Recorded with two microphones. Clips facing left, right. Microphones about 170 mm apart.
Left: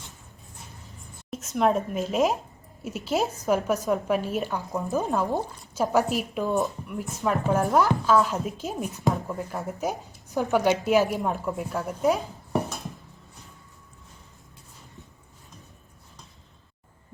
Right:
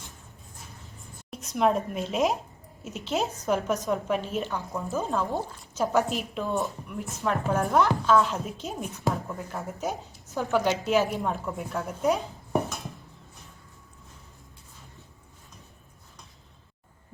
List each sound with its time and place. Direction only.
1.3 s speech: centre (ahead or behind)
6.1 s speech: centre (ahead or behind)
6.4 s speech: 15° left (ahead or behind)
6.7 s speech: centre (ahead or behind)
10.3 s speech: 15° left (ahead or behind)
11.2 s speech: centre (ahead or behind)